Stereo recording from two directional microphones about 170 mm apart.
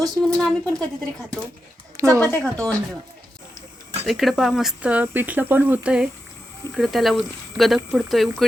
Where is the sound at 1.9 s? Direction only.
15° right (ahead or behind).